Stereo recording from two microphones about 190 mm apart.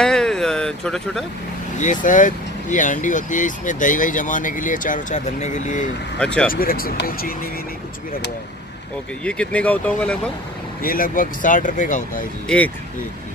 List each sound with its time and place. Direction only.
0.0 s a sound: 5° left (ahead or behind)
1.8 s speech: 40° left (ahead or behind)
6.1 s speech: 5° left (ahead or behind)
6.5 s speech: 50° left (ahead or behind)
9.2 s speech: 5° left (ahead or behind)
10.8 s speech: 50° left (ahead or behind)
12.4 s speech: 5° left (ahead or behind)